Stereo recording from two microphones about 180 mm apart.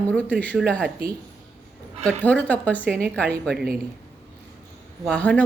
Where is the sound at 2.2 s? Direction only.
10° left (ahead or behind).